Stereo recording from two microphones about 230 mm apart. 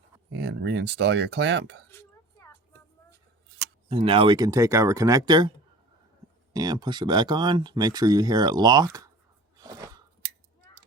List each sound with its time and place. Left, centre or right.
0.3 s speech: right
1.9 s a sound: centre
3.8 s speech: right
6.5 s speech: centre
9.6 s crunch: centre
10.7 s a sound: centre